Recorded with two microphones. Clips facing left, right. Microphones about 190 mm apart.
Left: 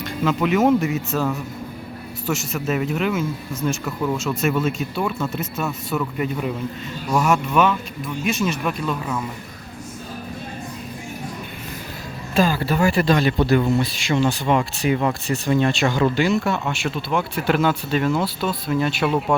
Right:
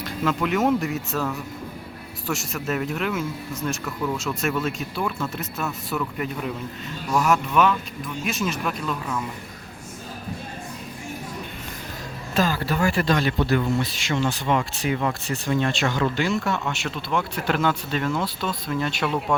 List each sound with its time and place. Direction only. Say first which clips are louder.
0.0 s speech: left 3 dB; centre (ahead or behind)
12.3 s speech: left 4 dB; 15° left (ahead or behind)